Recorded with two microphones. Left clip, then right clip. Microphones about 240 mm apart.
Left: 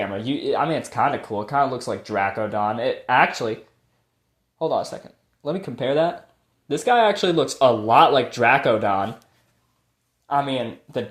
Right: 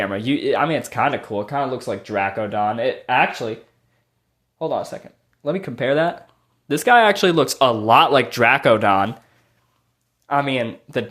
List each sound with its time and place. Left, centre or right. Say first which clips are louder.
0.0 s speech: right 4 dB; right
4.5 s speech: even; centre; by 9.1 s right
10.2 s speech: right 2 dB; right